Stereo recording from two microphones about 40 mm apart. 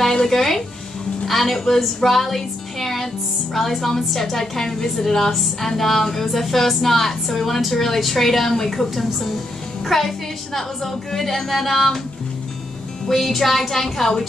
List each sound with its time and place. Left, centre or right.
0.0 s music: centre
1.2 s a woman's voice: centre
13.1 s a woman's voice: centre